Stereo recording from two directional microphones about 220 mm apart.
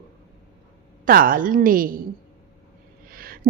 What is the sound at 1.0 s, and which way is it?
Speech, 40° right (ahead or behind).